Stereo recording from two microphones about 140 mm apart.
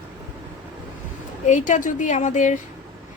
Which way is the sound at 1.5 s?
65° left (ahead or behind).